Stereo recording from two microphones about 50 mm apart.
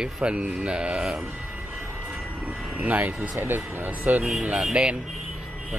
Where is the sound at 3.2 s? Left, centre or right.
Right.